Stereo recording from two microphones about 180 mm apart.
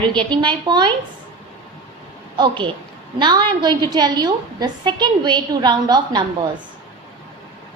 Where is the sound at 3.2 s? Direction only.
25° right (ahead or behind).